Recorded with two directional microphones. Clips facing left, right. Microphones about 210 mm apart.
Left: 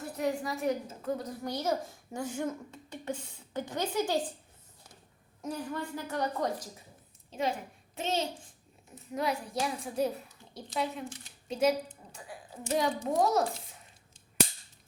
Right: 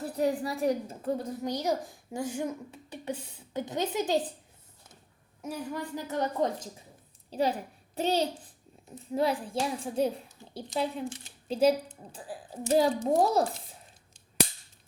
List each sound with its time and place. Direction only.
0.0 s a woman's voice: 35° right (ahead or behind)
1.5 s a woman's voice: 20° right (ahead or behind)
5.4 s a woman's voice: 10° right (ahead or behind)
7.3 s a child's voice: 35° right (ahead or behind)